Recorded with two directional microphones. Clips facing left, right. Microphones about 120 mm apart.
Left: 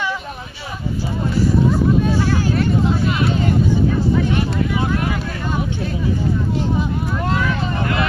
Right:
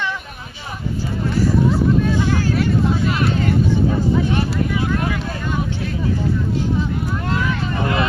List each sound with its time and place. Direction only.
7.4 s vehicle: 20° right (ahead or behind)